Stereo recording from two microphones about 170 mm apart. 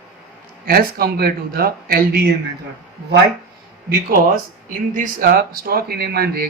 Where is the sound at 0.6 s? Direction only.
60° right (ahead or behind).